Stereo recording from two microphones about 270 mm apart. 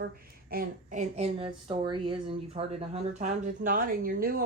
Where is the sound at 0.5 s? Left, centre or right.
Right.